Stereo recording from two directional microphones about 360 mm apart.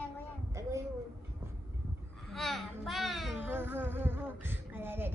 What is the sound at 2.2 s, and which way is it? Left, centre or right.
Speech, centre.